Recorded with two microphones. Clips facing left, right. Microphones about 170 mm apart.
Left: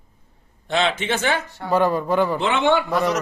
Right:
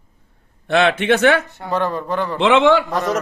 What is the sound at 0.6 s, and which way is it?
Speech, 60° right (ahead or behind).